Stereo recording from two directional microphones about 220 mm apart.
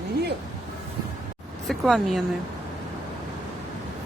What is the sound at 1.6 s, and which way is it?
Speech, centre (ahead or behind).